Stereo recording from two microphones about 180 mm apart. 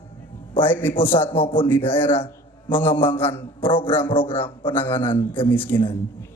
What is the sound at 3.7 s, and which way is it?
Speech, 10° left (ahead or behind).